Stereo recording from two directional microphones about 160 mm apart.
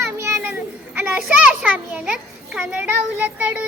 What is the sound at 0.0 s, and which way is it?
Children playing, 15° right (ahead or behind).